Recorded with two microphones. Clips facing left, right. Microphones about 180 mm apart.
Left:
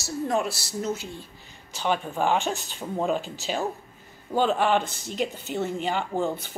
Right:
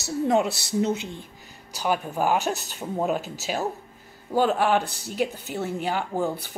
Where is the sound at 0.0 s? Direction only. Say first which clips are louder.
Right 4 dB; 20° right (ahead or behind).